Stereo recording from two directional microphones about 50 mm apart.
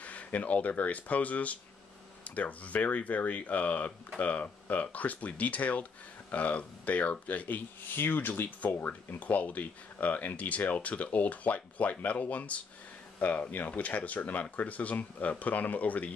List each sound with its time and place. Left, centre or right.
0.0 s speech: left
9.2 s speech: left